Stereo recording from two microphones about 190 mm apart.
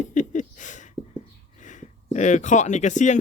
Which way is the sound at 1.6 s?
40° left (ahead or behind).